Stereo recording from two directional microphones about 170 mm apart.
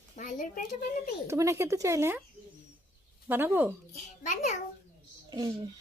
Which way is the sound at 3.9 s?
45° left (ahead or behind).